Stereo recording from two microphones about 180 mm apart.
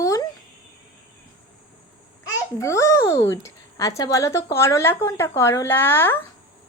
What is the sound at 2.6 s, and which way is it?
Speech, 15° left (ahead or behind).